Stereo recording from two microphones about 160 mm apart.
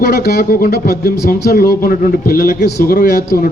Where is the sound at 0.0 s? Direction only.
85° left.